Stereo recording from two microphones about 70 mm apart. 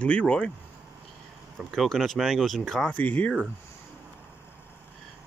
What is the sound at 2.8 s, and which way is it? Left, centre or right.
Speech, left.